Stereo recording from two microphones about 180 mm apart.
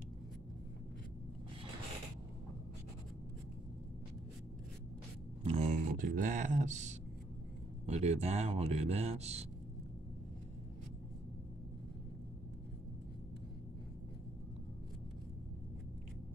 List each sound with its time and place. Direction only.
5.4 s speech: 35° right (ahead or behind)